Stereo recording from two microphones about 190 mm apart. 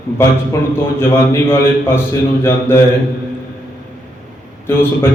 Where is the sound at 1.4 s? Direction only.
10° left (ahead or behind).